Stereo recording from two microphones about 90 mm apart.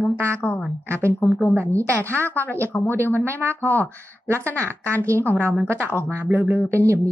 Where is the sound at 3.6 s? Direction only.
30° right (ahead or behind).